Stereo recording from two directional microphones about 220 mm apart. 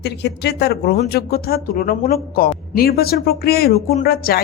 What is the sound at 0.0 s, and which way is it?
Speech, 50° left (ahead or behind).